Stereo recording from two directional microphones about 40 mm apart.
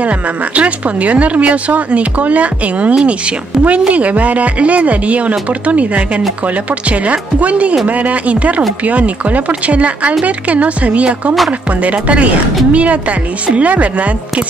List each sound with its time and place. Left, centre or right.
0.0 s speech: right